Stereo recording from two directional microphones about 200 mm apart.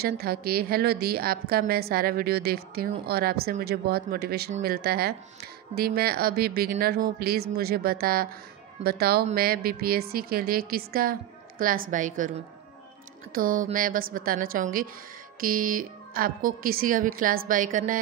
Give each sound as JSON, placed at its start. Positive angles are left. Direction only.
{"t": 0.0, "sound": "a woman's voice", "side_deg": -50}
{"t": 13.3, "sound": "speech", "side_deg": -45}